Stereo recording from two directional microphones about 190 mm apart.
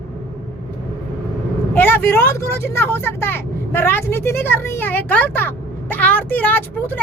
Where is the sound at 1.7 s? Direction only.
10° left (ahead or behind).